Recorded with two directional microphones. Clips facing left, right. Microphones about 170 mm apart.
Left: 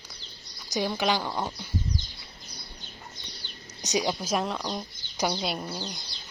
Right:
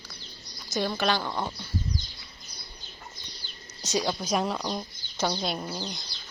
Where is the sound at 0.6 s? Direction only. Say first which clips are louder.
Even; 15° left (ahead or behind).